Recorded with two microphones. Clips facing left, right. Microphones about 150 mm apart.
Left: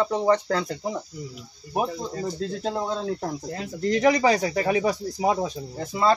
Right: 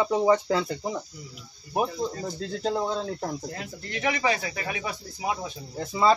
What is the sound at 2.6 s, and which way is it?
Speech, 5° left (ahead or behind).